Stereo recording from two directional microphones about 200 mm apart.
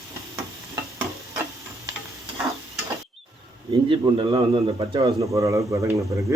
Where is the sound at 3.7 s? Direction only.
25° right (ahead or behind).